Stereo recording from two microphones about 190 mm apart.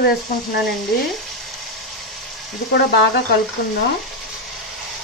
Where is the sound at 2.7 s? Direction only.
60° left (ahead or behind).